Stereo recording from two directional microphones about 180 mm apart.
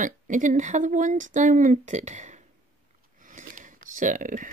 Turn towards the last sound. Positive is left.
turn(degrees=-45)  # may be behind; listen again after turning